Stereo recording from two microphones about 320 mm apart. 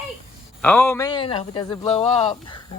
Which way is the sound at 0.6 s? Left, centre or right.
Centre.